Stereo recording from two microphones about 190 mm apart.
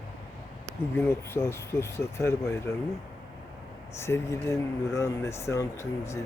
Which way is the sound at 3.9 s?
15° left (ahead or behind).